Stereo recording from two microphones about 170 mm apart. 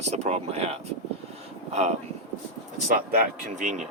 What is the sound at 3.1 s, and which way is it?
Speech, 50° right (ahead or behind).